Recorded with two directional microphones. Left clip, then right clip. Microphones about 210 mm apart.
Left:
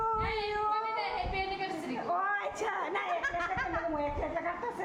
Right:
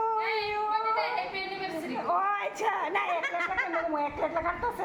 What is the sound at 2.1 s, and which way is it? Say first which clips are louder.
A woman's voice: right 4 dB; 5° right (ahead or behind).